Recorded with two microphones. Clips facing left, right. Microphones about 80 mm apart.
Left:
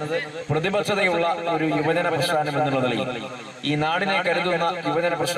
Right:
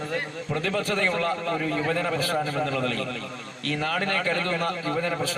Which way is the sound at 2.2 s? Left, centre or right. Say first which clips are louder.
Left 4 dB; left.